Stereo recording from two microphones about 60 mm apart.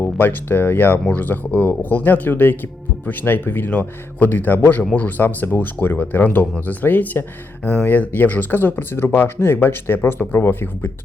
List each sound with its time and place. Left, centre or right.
0.0 s speech: left